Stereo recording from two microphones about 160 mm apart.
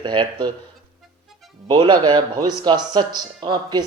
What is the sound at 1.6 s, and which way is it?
Speech, 30° right (ahead or behind).